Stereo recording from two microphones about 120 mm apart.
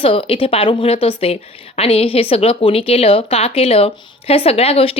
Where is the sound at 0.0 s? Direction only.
50° left (ahead or behind).